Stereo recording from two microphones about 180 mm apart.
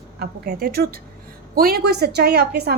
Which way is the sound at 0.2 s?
60° right (ahead or behind).